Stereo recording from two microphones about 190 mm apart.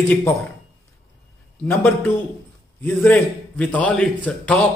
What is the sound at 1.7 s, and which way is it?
A man's voice, 10° left (ahead or behind).